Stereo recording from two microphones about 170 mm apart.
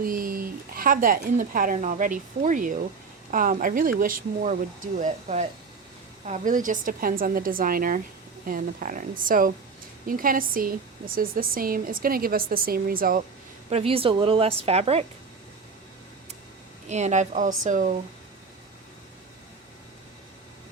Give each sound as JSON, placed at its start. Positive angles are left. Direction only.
{"t": 0.0, "sound": "a woman's voice", "side_deg": -55}
{"t": 13.7, "sound": "a woman's voice", "side_deg": -35}
{"t": 16.9, "sound": "a woman's voice", "side_deg": -45}